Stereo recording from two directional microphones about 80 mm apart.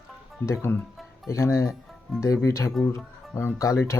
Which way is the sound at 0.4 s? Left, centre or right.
Left.